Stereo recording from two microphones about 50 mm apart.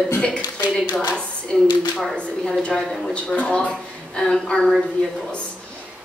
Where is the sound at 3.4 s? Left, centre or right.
Left.